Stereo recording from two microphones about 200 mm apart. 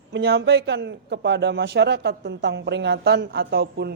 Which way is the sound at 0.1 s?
60° right (ahead or behind).